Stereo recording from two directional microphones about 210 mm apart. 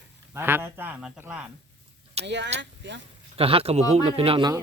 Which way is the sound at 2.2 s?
55° right (ahead or behind).